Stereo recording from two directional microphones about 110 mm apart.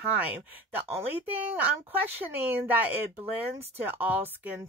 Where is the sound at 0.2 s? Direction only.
15° right (ahead or behind).